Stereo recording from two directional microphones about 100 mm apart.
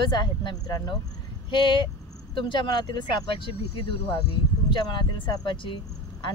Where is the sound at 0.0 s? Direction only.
50° left (ahead or behind).